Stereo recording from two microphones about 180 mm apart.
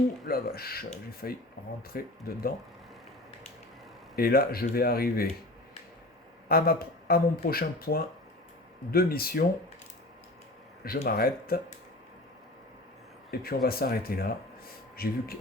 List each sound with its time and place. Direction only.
0.3 s speech: 55° left (ahead or behind)
4.1 s speech: 55° left (ahead or behind)
6.5 s speech: 55° left (ahead or behind)
10.8 s speech: 55° left (ahead or behind)
13.4 s speech: 55° left (ahead or behind)